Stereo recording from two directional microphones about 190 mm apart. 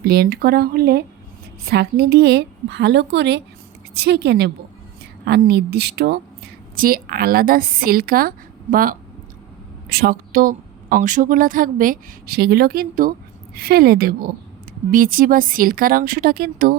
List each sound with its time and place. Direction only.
0.0 s a woman's voice: 55° right (ahead or behind)